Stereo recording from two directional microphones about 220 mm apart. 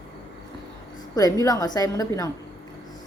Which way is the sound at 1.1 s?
15° left (ahead or behind).